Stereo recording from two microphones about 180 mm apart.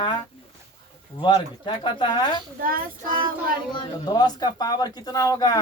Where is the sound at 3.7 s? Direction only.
25° left (ahead or behind).